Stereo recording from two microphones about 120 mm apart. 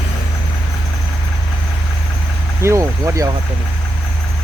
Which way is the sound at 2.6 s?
25° right (ahead or behind).